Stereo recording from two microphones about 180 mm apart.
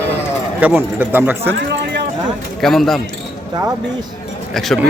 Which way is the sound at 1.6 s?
70° right (ahead or behind).